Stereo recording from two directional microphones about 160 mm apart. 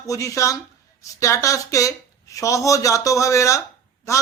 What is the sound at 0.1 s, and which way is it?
A woman's voice, 20° left (ahead or behind).